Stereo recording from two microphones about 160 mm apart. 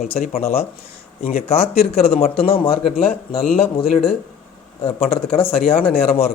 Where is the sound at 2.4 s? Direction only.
35° left (ahead or behind).